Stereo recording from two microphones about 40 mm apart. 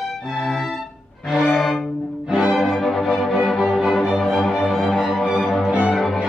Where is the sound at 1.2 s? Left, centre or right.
Centre.